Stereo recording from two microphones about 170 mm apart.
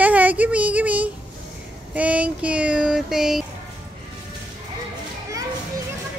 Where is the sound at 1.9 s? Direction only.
10° right (ahead or behind).